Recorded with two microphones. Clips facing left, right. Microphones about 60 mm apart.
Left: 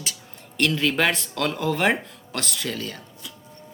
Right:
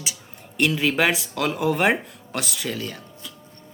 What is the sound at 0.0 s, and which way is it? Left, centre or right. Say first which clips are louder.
Speech: even; centre.